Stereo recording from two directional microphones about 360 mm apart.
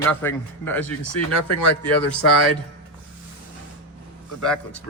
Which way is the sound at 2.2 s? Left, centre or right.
Left.